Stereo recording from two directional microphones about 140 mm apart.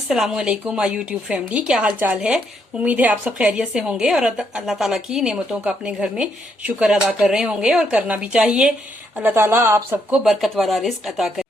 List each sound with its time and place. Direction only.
0.1 s a woman's voice: 5° right (ahead or behind)
10.2 s speech: centre (ahead or behind)